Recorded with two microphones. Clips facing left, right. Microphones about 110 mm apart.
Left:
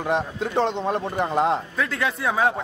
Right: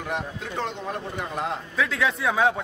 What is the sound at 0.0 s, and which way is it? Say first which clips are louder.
Speech: left 7 dB; 35° left (ahead or behind).